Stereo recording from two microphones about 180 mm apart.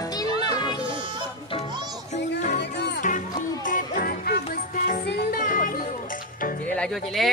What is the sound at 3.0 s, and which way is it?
Music, 45° left (ahead or behind).